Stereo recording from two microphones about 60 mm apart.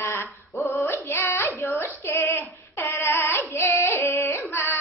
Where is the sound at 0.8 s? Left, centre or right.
Left.